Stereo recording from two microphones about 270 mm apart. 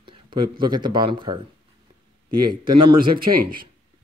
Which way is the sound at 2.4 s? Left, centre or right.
Centre.